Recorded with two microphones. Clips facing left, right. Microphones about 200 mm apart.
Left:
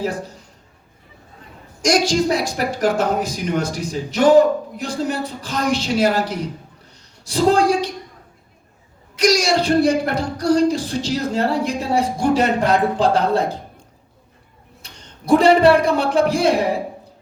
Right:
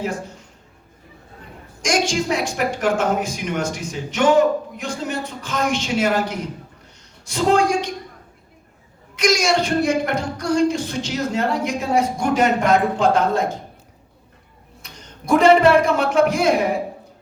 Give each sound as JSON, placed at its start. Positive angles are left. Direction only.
{"t": 0.0, "sound": "a woman's voice", "side_deg": 35}
{"t": 1.8, "sound": "a woman's voice", "side_deg": 35}
{"t": 9.1, "sound": "a woman's voice", "side_deg": 35}
{"t": 14.8, "sound": "a man's voice", "side_deg": 30}